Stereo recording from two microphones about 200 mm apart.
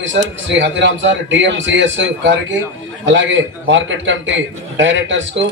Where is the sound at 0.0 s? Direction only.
65° right (ahead or behind).